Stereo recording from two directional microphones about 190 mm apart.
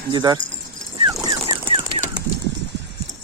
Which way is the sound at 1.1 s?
25° right (ahead or behind).